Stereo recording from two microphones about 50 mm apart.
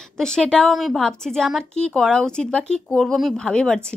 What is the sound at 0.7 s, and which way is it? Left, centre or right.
Speech, centre.